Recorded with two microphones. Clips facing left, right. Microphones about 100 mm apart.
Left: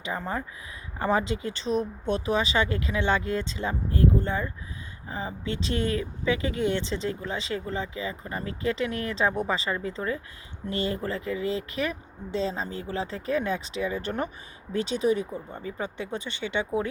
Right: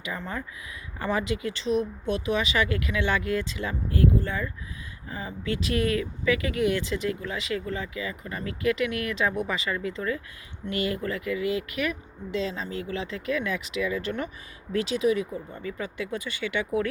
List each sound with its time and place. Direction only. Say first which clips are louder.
0.0 s speech: left 3 dB; 30° left (ahead or behind)